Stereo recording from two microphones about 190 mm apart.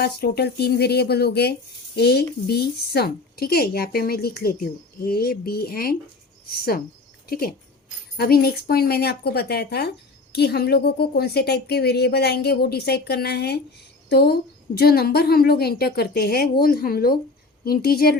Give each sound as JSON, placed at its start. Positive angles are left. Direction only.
{"t": 0.0, "sound": "a woman's voice", "side_deg": 55}